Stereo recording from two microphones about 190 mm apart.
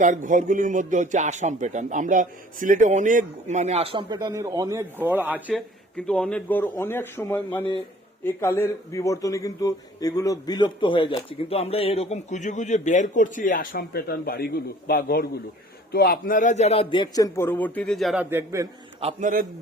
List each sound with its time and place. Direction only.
0.0 s speech: 40° right (ahead or behind); by 5.6 s 5° right (ahead or behind)
6.0 s a man's voice: 5° left (ahead or behind); by 18.7 s 15° right (ahead or behind)
18.9 s speech: 30° right (ahead or behind)